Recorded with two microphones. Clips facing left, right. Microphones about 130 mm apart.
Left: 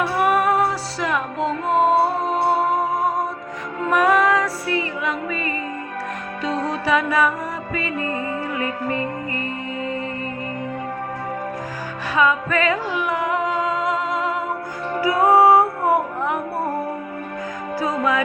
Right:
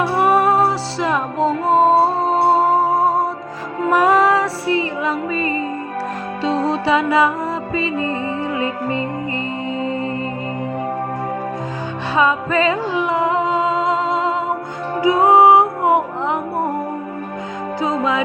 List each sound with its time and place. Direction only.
0.0 s music: 30° right (ahead or behind)
12.1 s music: 30° right (ahead or behind)
17.7 s music: 20° right (ahead or behind)